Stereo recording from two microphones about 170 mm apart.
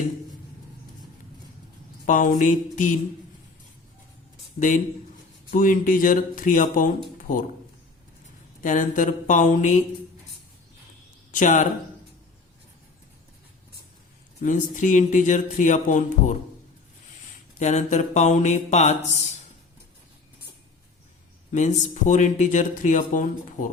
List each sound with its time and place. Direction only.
2.0 s speech: 50° left (ahead or behind)
5.5 s speech: 55° left (ahead or behind)
7.2 s a sound: 50° left (ahead or behind)
8.6 s speech: 50° left (ahead or behind)
11.3 s speech: 50° left (ahead or behind)
14.4 s speech: 45° left (ahead or behind)
17.6 s speech: 45° left (ahead or behind)
21.5 s speech: 45° left (ahead or behind)